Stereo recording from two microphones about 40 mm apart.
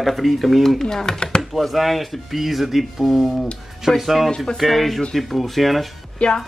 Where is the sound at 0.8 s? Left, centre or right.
Centre.